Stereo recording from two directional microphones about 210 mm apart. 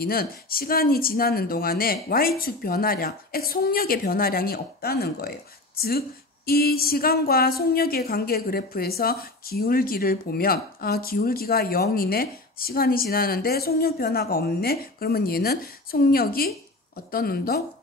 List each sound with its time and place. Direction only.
0.0 s a woman's voice: 45° left (ahead or behind)